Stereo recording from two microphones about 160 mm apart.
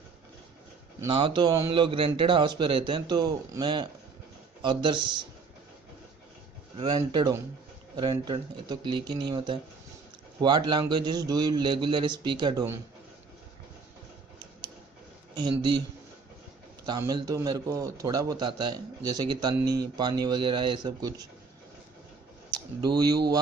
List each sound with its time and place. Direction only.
1.0 s a man's voice: 30° right (ahead or behind)
6.8 s a man's voice: 30° right (ahead or behind)
16.8 s a man's voice: 25° right (ahead or behind)